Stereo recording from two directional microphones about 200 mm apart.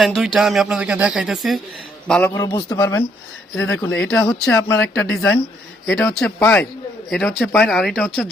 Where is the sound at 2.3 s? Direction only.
20° left (ahead or behind).